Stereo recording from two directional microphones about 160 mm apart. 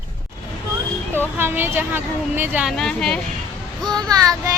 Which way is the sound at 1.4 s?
15° right (ahead or behind).